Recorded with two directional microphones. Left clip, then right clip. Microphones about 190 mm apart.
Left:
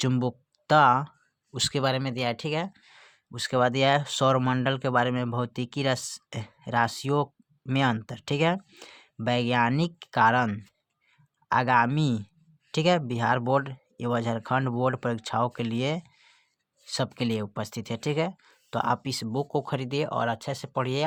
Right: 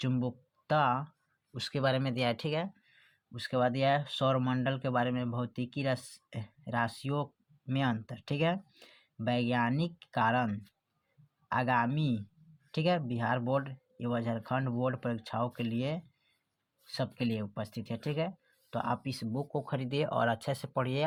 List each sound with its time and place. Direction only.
0.0 s speech: 40° left (ahead or behind)
2.8 s speech: 40° left (ahead or behind); by 21.0 s 20° left (ahead or behind)